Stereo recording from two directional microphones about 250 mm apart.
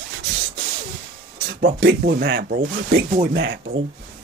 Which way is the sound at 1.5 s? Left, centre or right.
Right.